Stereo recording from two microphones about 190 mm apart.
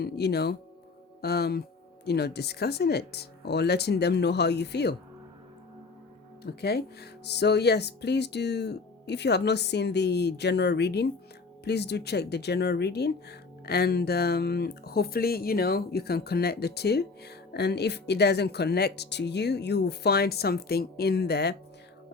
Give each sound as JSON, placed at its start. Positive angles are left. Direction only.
{"t": 0.0, "sound": "speech", "side_deg": 60}
{"t": 6.4, "sound": "speech", "side_deg": 60}